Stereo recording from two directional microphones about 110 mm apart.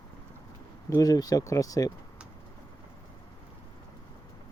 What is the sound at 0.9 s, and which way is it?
Speech, 35° left (ahead or behind).